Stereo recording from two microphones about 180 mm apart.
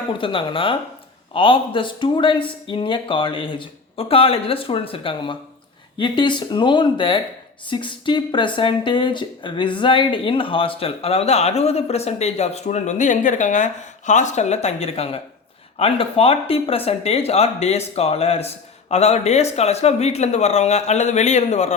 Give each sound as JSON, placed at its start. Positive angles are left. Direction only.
{"t": 0.2, "sound": "speech", "side_deg": 30}